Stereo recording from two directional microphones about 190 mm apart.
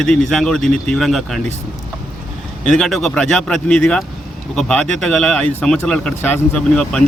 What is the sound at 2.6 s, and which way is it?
A man's voice, centre (ahead or behind).